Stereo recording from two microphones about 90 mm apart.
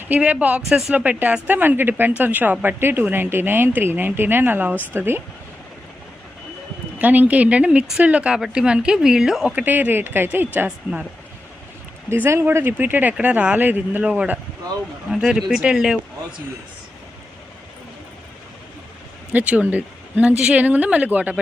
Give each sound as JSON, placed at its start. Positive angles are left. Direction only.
{"t": 0.1, "sound": "speech", "side_deg": -15}
{"t": 0.9, "sound": "a woman's voice", "side_deg": -15}
{"t": 7.0, "sound": "speech", "side_deg": -20}
{"t": 9.5, "sound": "a woman's voice", "side_deg": -20}
{"t": 12.0, "sound": "a woman's voice", "side_deg": -25}
{"t": 19.3, "sound": "speech", "side_deg": -20}